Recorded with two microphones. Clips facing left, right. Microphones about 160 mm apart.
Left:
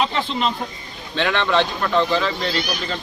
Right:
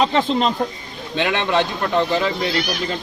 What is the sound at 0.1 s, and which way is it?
Speech, 40° right (ahead or behind).